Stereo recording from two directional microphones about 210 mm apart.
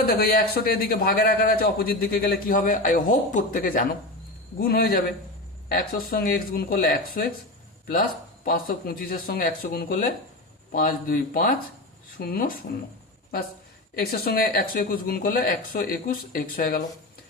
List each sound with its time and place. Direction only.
0.2 s a man's voice: 45° left (ahead or behind)
8.4 s a man's voice: 45° left (ahead or behind)
13.9 s a man's voice: 45° left (ahead or behind)